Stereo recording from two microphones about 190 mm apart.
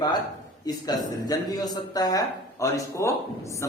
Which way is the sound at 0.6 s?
20° left (ahead or behind).